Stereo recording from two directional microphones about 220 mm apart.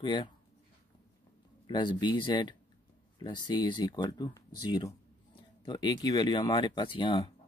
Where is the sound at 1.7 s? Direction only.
20° left (ahead or behind).